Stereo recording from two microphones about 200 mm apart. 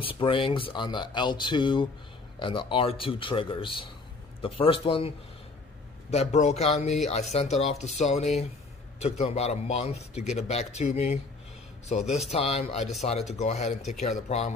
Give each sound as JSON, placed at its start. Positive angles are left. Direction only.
{"t": 0.0, "sound": "speech", "side_deg": 25}